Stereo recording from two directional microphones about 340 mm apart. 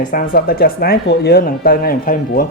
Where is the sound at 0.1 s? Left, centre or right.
Left.